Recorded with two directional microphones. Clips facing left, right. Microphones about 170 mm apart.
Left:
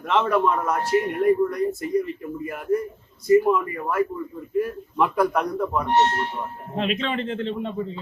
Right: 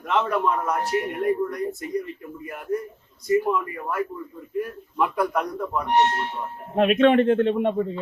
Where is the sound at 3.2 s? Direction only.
Centre (ahead or behind).